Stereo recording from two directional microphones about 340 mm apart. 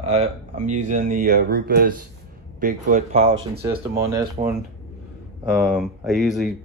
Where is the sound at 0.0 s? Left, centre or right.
Centre.